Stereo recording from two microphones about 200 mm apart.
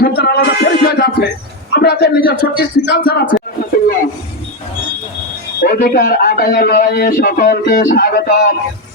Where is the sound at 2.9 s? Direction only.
50° left (ahead or behind).